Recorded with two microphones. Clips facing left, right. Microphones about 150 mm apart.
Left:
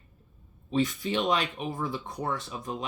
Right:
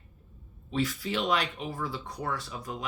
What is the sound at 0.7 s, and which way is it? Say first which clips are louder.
Speech: left 3 dB; 20° left (ahead or behind).